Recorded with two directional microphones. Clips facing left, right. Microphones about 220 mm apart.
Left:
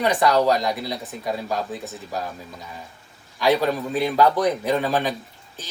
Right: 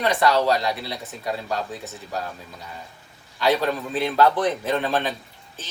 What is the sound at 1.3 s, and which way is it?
Speech, 10° left (ahead or behind).